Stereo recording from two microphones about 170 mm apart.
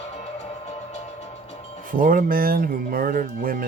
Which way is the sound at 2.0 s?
55° right (ahead or behind).